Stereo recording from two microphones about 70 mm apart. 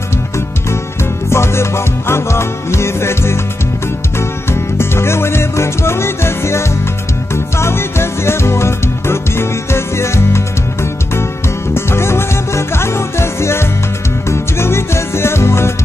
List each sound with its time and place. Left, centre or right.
1.3 s music: left